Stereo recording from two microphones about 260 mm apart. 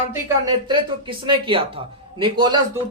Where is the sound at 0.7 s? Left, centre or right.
Centre.